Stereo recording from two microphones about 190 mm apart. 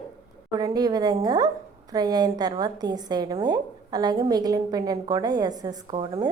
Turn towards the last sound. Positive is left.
turn(degrees=-25)  # may be behind; listen again after turning